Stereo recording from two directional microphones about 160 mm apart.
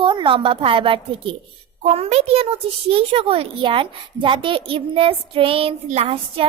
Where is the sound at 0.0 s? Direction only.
30° right (ahead or behind).